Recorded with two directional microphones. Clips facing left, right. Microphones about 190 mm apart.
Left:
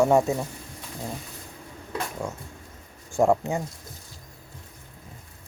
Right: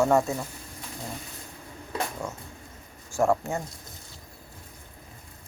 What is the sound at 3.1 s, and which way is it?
Speech, 20° left (ahead or behind).